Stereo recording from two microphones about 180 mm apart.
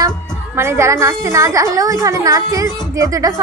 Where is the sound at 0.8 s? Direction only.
15° right (ahead or behind).